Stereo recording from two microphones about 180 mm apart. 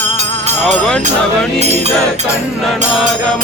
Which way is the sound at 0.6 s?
5° left (ahead or behind).